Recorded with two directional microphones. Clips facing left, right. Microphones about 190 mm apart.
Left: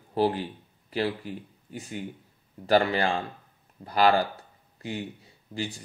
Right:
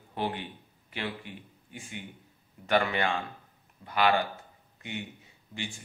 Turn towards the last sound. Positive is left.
turn(degrees=35)  # may be behind; listen again after turning